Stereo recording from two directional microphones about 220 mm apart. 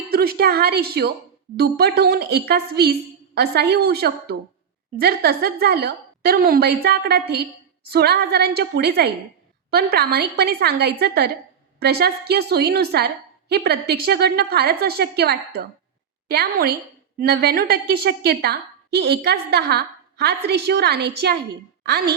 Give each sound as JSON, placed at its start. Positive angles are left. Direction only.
{"t": 0.1, "sound": "a woman's voice", "side_deg": -45}